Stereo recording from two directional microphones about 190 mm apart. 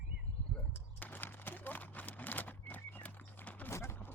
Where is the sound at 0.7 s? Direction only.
10° left (ahead or behind).